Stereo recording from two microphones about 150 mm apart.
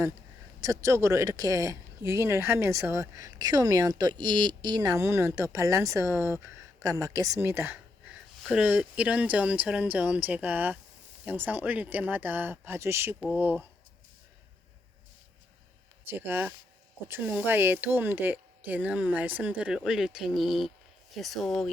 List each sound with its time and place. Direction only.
0.6 s a woman's voice: 20° right (ahead or behind)
16.1 s speech: 15° right (ahead or behind); by 21.7 s 5° left (ahead or behind)